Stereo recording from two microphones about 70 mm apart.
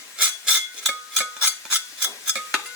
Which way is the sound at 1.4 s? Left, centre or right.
Centre.